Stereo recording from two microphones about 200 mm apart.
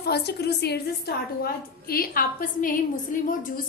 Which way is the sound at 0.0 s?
55° left (ahead or behind).